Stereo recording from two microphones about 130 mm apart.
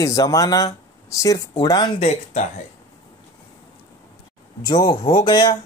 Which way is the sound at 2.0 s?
65° left (ahead or behind).